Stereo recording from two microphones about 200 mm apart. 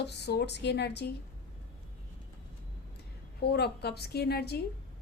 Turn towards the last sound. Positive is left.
turn(degrees=50)  # may be behind; listen again after turning